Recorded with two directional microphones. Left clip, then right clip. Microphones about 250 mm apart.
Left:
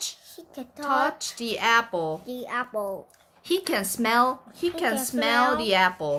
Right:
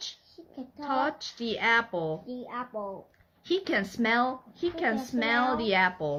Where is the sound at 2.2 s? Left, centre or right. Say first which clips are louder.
Left 7 dB; left.